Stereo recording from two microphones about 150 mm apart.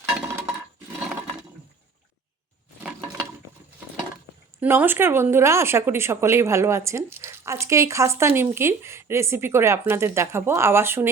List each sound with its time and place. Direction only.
0.2 s chink: 15° right (ahead or behind)
4.6 s speech: 10° right (ahead or behind)